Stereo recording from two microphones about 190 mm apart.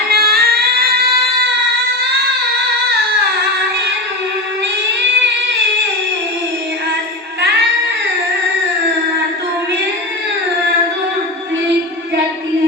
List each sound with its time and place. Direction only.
0.1 s music: 55° right (ahead or behind)